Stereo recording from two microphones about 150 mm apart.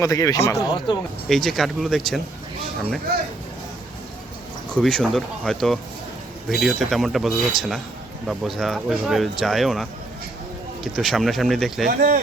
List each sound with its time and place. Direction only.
0.0 s speech: 25° left (ahead or behind)
1.3 s speech: centre (ahead or behind)
4.7 s speech: 5° left (ahead or behind)
10.9 s speech: centre (ahead or behind)
11.9 s speech: 75° right (ahead or behind)